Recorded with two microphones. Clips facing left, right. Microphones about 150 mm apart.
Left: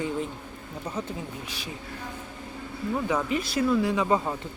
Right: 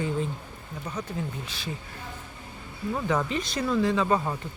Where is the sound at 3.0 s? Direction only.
10° left (ahead or behind).